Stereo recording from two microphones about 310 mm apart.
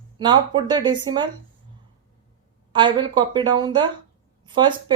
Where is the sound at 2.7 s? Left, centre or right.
Centre.